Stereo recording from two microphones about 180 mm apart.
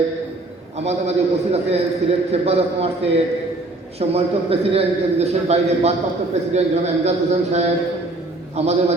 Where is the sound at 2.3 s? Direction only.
35° right (ahead or behind).